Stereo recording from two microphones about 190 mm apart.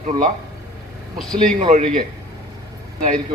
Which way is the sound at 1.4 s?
40° right (ahead or behind).